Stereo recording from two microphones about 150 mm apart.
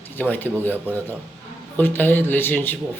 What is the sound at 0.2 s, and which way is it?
Speech, 15° left (ahead or behind).